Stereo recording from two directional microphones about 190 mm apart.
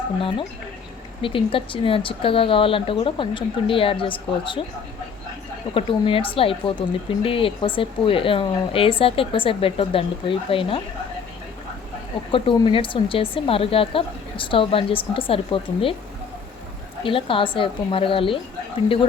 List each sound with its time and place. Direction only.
0.2 s speech: 25° left (ahead or behind)
5.7 s speech: 30° left (ahead or behind)
12.3 s speech: 25° left (ahead or behind)
17.0 s speech: 25° left (ahead or behind)